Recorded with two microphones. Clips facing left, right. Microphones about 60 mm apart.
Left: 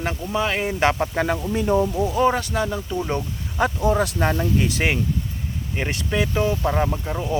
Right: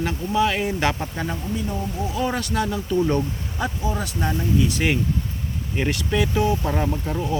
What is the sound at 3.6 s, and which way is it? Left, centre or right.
Speech, left.